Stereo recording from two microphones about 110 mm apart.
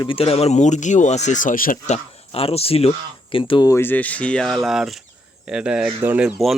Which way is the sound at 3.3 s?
50° left (ahead or behind).